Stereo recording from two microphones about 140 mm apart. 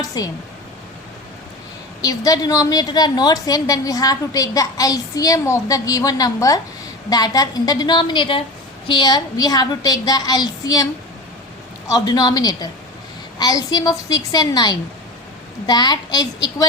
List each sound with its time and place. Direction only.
0.0 s speech: 25° left (ahead or behind)
2.0 s a woman's voice: 25° left (ahead or behind)
11.9 s a woman's voice: 25° left (ahead or behind)